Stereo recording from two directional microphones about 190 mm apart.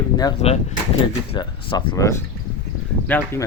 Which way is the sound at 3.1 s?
10° left (ahead or behind).